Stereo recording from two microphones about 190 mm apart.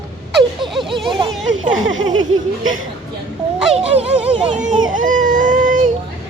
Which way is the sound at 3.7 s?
30° right (ahead or behind).